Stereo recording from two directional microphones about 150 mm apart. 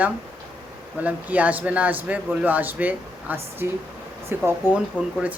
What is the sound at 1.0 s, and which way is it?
A man's voice, 10° right (ahead or behind).